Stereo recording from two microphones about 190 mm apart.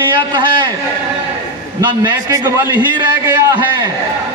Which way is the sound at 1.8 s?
25° right (ahead or behind).